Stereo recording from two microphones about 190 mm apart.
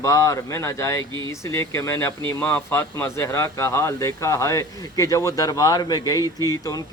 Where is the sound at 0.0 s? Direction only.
20° left (ahead or behind).